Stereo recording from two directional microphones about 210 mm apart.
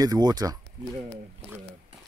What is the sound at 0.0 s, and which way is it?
Speech, 20° right (ahead or behind).